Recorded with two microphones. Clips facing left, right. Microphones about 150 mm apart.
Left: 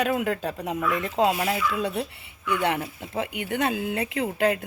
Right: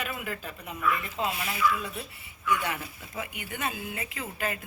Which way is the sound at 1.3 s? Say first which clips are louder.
Left 3 dB; 65° left (ahead or behind).